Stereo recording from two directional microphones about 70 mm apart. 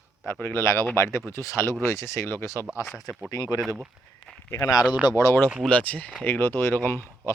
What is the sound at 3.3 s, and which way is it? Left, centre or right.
Speech, left.